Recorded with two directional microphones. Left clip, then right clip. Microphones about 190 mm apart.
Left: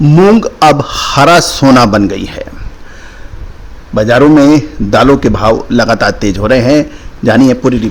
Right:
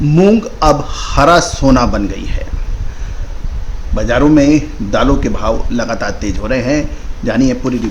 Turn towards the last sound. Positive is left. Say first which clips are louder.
# left 7 dB
turn(degrees=45)  # may be behind; listen again after turning